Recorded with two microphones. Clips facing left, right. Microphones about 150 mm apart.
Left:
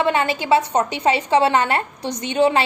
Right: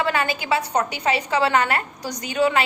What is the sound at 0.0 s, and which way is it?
A woman's voice, 25° left (ahead or behind).